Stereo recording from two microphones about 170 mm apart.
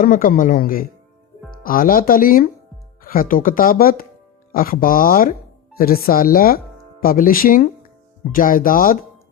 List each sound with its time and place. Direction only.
0.0 s speech: 55° left (ahead or behind)